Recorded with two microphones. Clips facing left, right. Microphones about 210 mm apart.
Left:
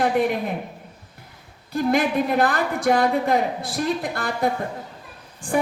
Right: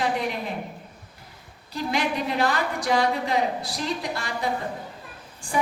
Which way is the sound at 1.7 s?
55° left (ahead or behind).